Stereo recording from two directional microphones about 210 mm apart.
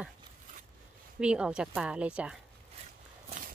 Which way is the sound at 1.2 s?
5° right (ahead or behind).